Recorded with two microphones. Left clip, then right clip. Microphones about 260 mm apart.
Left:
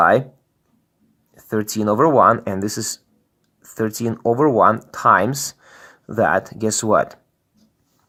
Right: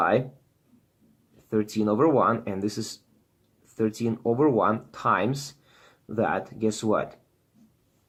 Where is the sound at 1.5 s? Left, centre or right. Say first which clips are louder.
Left 6 dB; left.